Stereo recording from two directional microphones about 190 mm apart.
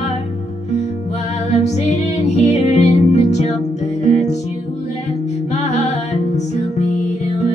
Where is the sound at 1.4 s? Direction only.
35° left (ahead or behind).